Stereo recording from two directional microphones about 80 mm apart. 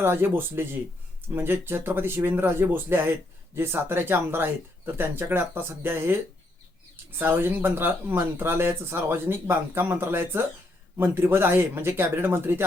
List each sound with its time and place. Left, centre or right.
0.0 s speech: right
7.2 s speech: right